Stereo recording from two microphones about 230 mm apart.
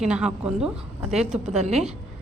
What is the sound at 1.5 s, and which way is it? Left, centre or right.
Speech, right.